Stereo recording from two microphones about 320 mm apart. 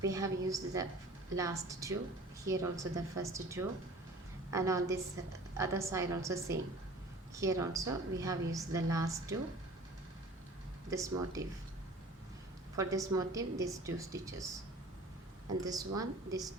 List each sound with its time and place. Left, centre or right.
0.0 s a woman's voice: centre
10.8 s speech: centre
12.7 s a woman's voice: centre
15.6 s a woman's voice: centre